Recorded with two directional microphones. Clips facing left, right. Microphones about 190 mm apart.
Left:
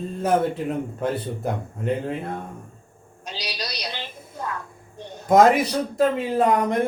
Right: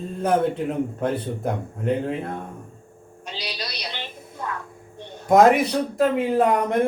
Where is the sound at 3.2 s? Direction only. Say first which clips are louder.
Even; 40° left (ahead or behind).